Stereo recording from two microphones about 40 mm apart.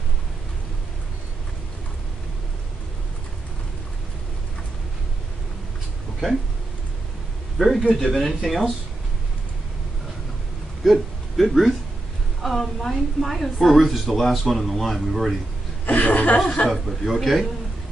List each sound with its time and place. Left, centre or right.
7.5 s a man's voice: centre
10.8 s a woman's voice: centre
15.9 s a woman's voice: left
16.6 s a woman's voice: centre